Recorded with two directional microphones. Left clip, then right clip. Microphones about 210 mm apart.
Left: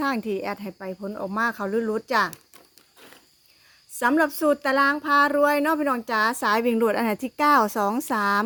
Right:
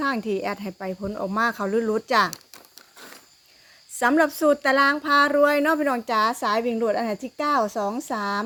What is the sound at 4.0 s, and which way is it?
Speech, 5° left (ahead or behind).